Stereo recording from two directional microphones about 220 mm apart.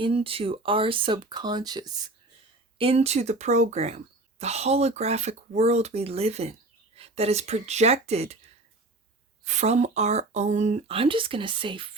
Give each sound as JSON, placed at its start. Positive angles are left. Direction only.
{"t": 0.0, "sound": "speech", "side_deg": -25}
{"t": 9.4, "sound": "speech", "side_deg": -30}